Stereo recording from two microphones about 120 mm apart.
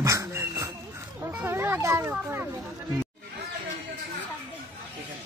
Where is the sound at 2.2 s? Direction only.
20° right (ahead or behind).